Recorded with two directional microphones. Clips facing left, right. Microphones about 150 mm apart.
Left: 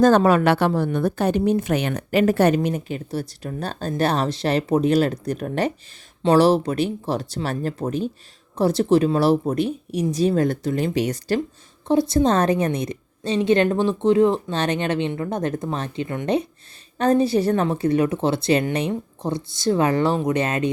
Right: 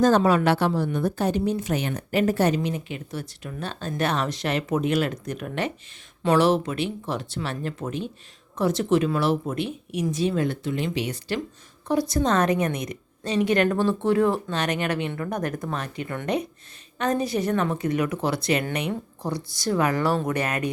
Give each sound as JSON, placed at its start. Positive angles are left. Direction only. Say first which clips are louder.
{"t": 0.0, "sound": "a woman's voice", "louder": "left 4 dB", "side_deg": 55}
{"t": 2.6, "sound": "speech", "louder": "left 4 dB", "side_deg": 45}
{"t": 11.9, "sound": "a woman's voice", "louder": "left 5 dB", "side_deg": 25}